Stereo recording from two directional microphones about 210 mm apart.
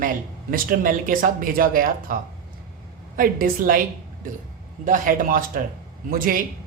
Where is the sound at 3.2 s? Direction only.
40° right (ahead or behind).